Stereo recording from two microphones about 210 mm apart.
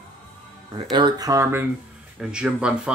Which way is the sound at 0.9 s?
20° right (ahead or behind).